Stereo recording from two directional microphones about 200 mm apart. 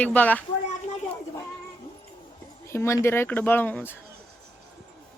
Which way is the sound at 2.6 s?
15° left (ahead or behind).